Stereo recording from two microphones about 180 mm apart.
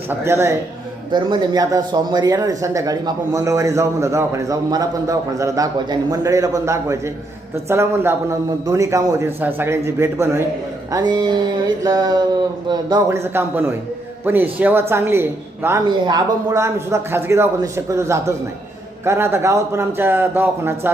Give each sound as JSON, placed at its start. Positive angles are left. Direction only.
{"t": 0.1, "sound": "speech", "side_deg": -15}
{"t": 1.1, "sound": "speech", "side_deg": -25}
{"t": 10.9, "sound": "mantra", "side_deg": -25}
{"t": 14.3, "sound": "speech", "side_deg": -10}